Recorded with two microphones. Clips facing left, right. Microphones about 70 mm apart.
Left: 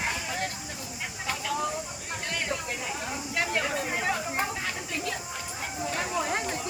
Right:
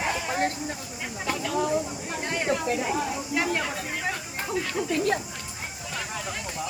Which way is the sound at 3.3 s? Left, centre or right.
Centre.